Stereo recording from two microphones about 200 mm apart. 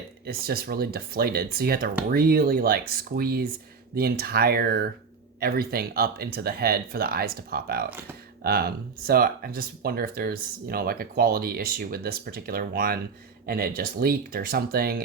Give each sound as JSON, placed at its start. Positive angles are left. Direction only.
{"t": 0.3, "sound": "speech", "side_deg": -50}